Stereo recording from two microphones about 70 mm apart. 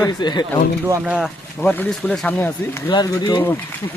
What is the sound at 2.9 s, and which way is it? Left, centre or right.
Speech, left.